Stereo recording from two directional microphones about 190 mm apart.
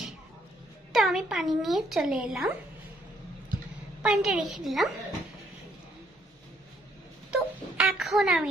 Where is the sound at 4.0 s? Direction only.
5° right (ahead or behind).